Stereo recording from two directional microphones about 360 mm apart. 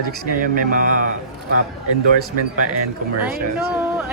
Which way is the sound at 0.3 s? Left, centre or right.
Right.